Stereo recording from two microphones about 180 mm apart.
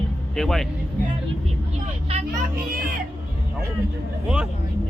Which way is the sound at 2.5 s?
55° right (ahead or behind).